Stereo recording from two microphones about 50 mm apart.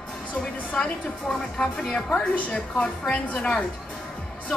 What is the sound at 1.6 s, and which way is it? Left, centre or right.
A woman's voice, centre.